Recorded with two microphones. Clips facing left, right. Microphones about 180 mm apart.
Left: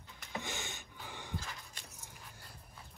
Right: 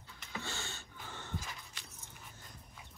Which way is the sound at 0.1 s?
15° left (ahead or behind).